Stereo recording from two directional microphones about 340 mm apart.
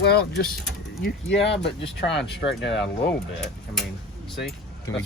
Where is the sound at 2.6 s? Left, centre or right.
Left.